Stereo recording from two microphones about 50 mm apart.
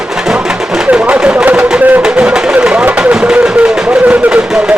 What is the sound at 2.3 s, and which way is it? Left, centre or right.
Speech, centre.